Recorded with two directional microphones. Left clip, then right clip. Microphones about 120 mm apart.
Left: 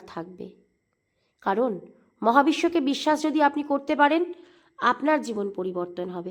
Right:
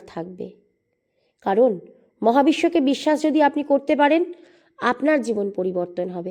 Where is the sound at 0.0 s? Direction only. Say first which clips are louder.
Right 5 dB; 30° right (ahead or behind).